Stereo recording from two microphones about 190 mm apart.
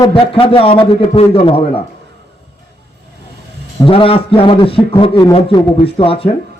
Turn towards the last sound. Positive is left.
turn(degrees=30)  # may be behind; listen again after turning